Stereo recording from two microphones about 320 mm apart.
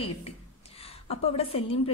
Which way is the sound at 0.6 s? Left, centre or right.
Centre.